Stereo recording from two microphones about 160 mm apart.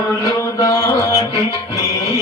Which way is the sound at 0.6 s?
20° left (ahead or behind).